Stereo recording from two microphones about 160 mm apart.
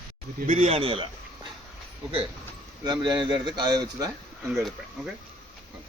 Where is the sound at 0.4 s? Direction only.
45° right (ahead or behind).